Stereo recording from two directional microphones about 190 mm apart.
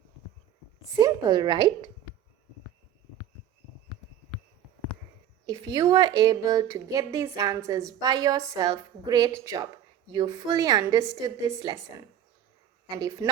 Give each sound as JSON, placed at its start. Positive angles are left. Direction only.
{"t": 0.9, "sound": "a woman's voice", "side_deg": -20}
{"t": 5.5, "sound": "a woman's voice", "side_deg": -20}
{"t": 12.9, "sound": "a woman's voice", "side_deg": -20}